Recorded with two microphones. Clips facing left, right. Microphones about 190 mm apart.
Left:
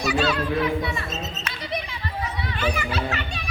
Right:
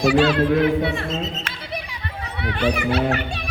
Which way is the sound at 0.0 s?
50° right (ahead or behind).